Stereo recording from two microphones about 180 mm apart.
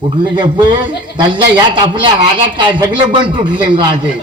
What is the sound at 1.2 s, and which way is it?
A man's voice, 25° right (ahead or behind).